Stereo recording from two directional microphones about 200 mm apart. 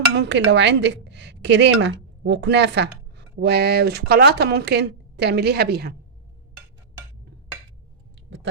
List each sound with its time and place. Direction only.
0.2 s speech: 60° right (ahead or behind)